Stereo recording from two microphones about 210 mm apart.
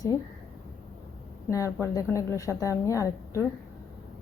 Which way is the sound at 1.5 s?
15° left (ahead or behind).